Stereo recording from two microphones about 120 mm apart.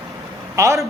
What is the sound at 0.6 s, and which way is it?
Speech, 25° right (ahead or behind).